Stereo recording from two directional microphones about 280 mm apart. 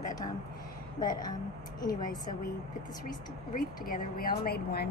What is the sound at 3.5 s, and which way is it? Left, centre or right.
A woman's voice, left.